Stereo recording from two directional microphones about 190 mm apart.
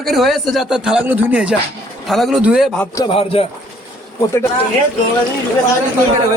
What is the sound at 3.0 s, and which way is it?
Speech, 30° left (ahead or behind).